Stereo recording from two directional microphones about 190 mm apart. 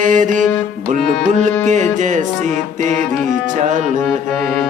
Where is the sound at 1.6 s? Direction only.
40° right (ahead or behind).